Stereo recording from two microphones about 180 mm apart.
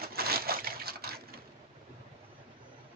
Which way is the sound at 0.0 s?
60° right (ahead or behind).